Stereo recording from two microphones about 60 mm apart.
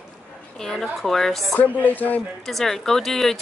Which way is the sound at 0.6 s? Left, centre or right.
Centre.